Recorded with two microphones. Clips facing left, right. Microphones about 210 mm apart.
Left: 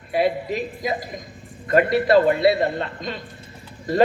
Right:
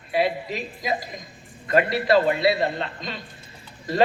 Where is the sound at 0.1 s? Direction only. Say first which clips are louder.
Left 3 dB; 50° left (ahead or behind).